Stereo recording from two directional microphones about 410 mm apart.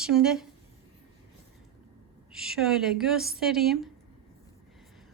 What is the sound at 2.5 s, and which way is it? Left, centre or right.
Speech, centre.